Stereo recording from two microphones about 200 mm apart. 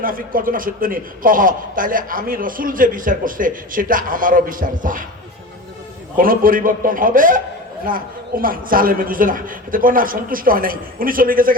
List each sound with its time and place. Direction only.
0.0 s a man's voice: 45° right (ahead or behind)
6.1 s a man's voice: 45° right (ahead or behind)